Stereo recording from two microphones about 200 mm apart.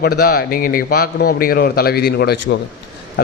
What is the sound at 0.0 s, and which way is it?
A man's voice, 50° left (ahead or behind).